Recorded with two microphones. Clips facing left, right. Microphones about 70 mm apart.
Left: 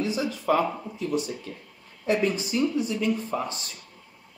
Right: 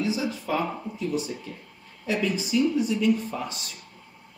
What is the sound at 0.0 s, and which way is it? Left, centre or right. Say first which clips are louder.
Speech: even; left.